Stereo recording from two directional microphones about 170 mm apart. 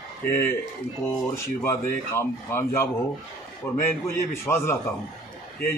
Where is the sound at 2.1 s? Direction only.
15° left (ahead or behind).